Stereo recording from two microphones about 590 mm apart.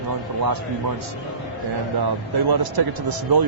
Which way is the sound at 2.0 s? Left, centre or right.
Right.